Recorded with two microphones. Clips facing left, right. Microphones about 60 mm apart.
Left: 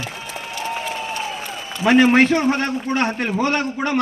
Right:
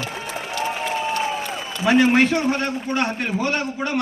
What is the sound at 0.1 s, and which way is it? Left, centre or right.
Applause, right.